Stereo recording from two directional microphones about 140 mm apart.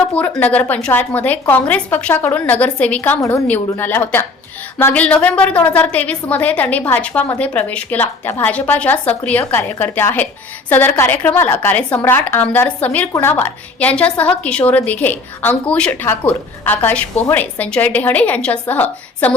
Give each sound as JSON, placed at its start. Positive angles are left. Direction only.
{"t": 0.1, "sound": "a woman's voice", "side_deg": 10}